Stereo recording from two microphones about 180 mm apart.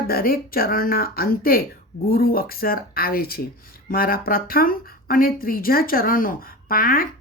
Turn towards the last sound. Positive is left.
turn(degrees=55)  # may be behind; listen again after turning